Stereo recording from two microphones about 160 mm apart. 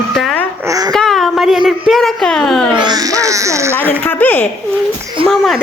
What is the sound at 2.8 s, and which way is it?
Speech, 25° right (ahead or behind).